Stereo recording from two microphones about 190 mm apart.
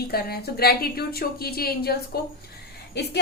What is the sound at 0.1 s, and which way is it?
A woman's voice, 55° left (ahead or behind).